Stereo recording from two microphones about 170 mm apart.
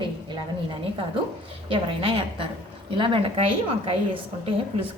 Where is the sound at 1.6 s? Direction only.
35° right (ahead or behind).